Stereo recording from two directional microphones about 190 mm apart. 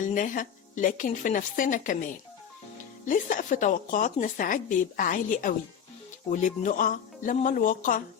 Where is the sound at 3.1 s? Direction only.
40° left (ahead or behind).